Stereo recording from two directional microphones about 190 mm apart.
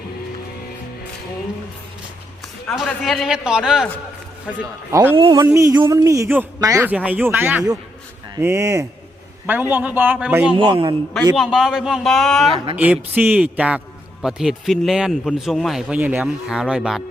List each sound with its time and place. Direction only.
2.7 s a man's voice: centre (ahead or behind)
4.9 s speech: 15° right (ahead or behind)
5.1 s a man's voice: 25° right (ahead or behind); by 10.5 s 5° right (ahead or behind)
10.5 s a man's voice: 25° right (ahead or behind)
11.3 s a man's voice: 5° right (ahead or behind)